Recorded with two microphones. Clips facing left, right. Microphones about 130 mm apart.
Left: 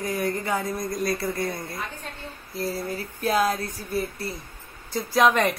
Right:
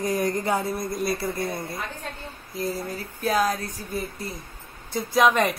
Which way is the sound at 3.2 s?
10° left (ahead or behind).